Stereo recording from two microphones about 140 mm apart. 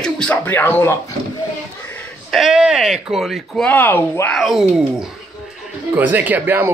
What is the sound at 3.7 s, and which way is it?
Speech, 15° left (ahead or behind).